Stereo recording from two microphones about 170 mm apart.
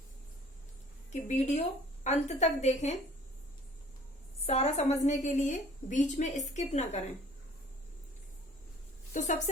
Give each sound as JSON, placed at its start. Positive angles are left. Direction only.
{"t": 1.1, "sound": "a woman's voice", "side_deg": 40}
{"t": 4.4, "sound": "a woman's voice", "side_deg": 40}